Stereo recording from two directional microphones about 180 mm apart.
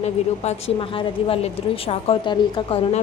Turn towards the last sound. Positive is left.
turn(degrees=30)  # may be behind; listen again after turning